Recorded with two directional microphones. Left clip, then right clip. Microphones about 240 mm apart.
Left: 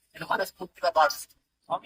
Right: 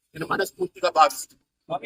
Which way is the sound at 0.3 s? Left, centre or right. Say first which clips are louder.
Right 3 dB; right.